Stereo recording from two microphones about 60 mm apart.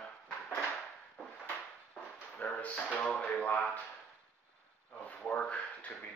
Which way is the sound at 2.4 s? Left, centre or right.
Left.